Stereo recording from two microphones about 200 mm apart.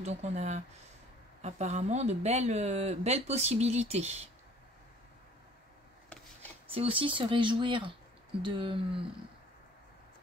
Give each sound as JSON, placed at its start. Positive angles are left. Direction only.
{"t": 0.0, "sound": "speech", "side_deg": -35}
{"t": 6.7, "sound": "speech", "side_deg": -30}